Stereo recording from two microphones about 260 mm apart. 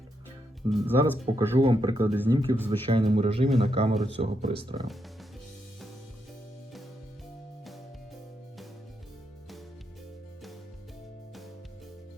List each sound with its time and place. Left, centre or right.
0.7 s speech: centre
1.2 s speech: right
2.1 s speech: centre
2.6 s speech: right